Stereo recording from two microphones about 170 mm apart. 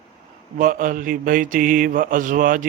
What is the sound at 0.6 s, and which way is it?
Speech, 55° right (ahead or behind).